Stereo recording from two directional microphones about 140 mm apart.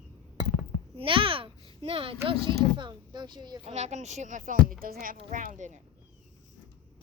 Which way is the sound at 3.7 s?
55° right (ahead or behind).